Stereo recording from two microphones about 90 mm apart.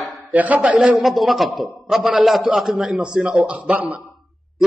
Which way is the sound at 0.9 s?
Centre (ahead or behind).